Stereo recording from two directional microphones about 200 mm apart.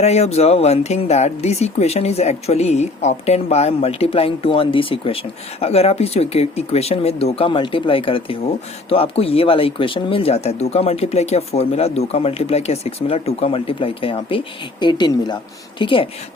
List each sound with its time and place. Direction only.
0.0 s speech: 30° left (ahead or behind)